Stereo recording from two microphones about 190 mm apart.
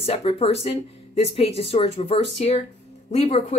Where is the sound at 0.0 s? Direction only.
30° left (ahead or behind).